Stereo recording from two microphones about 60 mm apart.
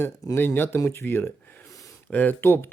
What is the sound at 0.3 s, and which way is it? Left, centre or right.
Speech, left.